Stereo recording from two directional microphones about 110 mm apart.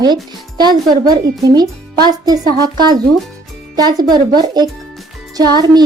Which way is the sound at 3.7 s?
40° right (ahead or behind).